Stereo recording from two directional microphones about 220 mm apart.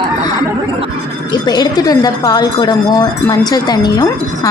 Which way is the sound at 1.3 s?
20° left (ahead or behind).